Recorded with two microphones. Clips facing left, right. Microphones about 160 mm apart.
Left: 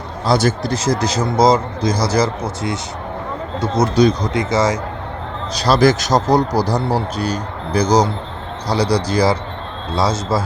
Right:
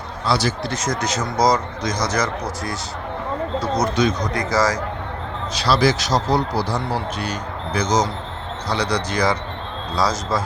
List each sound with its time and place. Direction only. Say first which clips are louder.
0.3 s speech: left 5 dB; 45° left (ahead or behind)
0.7 s speech: left 5 dB; 30° left (ahead or behind)
5.5 s speech: left 5 dB; 45° left (ahead or behind); by 10.4 s 25° left (ahead or behind)